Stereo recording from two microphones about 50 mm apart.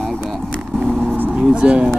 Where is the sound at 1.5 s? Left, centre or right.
Right.